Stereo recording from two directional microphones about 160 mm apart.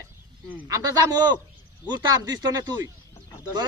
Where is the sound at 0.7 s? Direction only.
25° right (ahead or behind).